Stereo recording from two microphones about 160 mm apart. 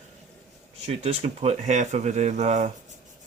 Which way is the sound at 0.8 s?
40° right (ahead or behind).